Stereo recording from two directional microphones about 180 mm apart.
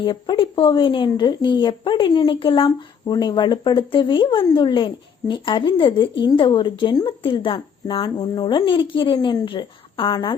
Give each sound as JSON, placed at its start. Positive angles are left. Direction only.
{"t": 0.0, "sound": "speech", "side_deg": 25}